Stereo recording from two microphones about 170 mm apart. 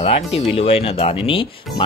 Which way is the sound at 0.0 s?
35° left (ahead or behind).